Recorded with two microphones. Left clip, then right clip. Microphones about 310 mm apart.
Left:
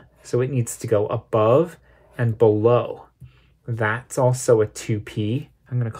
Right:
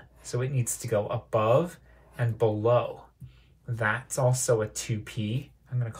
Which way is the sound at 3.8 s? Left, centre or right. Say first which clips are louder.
Left 5 dB; left.